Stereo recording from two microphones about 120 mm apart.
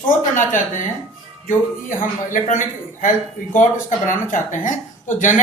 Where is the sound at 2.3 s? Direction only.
90° left.